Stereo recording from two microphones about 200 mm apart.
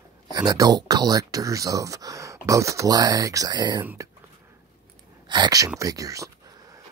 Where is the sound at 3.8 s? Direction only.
10° right (ahead or behind).